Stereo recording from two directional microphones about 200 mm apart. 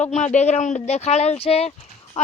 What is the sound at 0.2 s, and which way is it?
Speech, 35° left (ahead or behind).